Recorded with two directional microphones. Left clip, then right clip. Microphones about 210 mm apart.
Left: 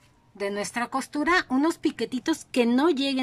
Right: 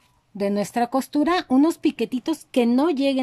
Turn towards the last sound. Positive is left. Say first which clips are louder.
# right 3 dB
turn(degrees=-5)  # may be behind; listen again after turning